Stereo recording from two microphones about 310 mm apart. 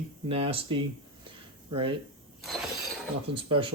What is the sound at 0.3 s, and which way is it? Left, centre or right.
Speech, centre.